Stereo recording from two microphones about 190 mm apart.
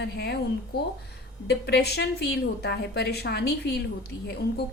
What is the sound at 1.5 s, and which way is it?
A woman's voice, 60° left (ahead or behind).